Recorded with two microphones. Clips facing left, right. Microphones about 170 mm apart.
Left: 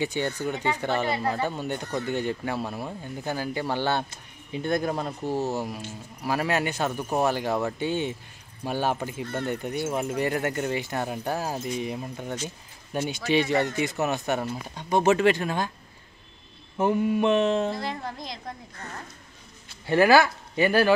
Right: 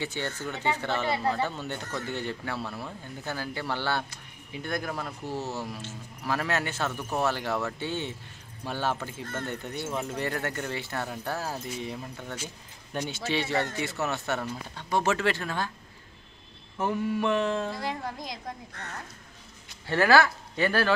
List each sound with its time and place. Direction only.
0.0 s speech: 15° left (ahead or behind)
5.3 s speech: 15° left (ahead or behind)
16.7 s mantra: 20° left (ahead or behind)
17.7 s a woman's voice: 10° right (ahead or behind)
19.9 s speech: 15° left (ahead or behind)